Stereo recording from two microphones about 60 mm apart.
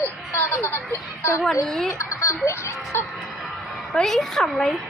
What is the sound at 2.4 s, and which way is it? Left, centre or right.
Speech, left.